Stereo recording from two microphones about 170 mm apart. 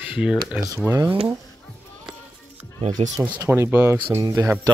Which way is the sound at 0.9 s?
20° right (ahead or behind).